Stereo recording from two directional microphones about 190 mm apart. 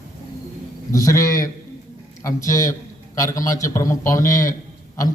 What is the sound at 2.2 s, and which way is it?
A man's voice, 15° left (ahead or behind).